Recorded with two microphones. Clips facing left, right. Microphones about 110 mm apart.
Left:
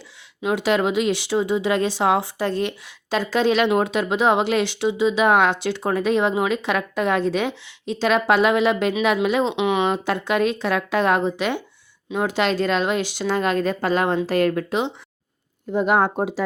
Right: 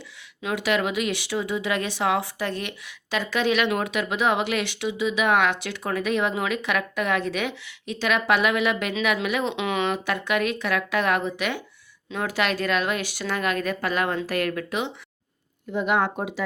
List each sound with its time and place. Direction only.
0.4 s speech: 30° left (ahead or behind)